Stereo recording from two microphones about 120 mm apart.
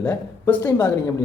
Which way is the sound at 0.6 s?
30° left (ahead or behind).